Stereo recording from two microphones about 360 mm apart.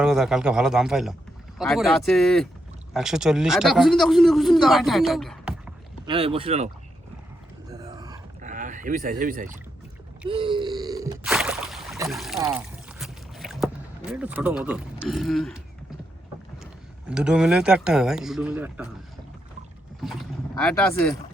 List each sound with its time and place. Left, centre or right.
0.0 s a man's voice: centre
6.1 s speech: centre
7.7 s a sound: centre
10.2 s boat: centre
17.1 s a man's voice: centre
20.6 s a man's voice: centre